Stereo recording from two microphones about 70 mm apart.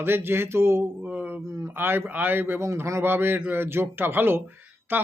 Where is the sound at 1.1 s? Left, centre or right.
Right.